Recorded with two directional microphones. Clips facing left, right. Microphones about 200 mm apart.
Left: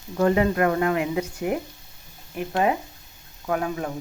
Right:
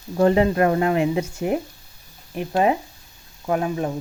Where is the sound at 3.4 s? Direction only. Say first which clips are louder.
Right 3 dB; 25° right (ahead or behind).